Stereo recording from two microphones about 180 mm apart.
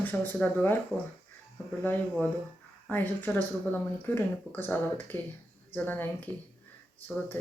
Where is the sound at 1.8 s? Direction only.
10° left (ahead or behind).